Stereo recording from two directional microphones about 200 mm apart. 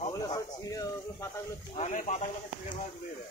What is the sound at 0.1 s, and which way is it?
Speech, 20° left (ahead or behind).